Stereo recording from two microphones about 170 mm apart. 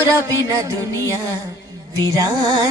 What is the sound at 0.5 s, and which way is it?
Music, 20° right (ahead or behind).